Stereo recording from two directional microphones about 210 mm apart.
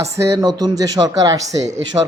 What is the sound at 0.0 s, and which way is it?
Speech, 15° right (ahead or behind).